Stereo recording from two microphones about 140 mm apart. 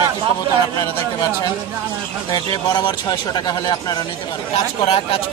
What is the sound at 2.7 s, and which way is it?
Speech, 30° left (ahead or behind).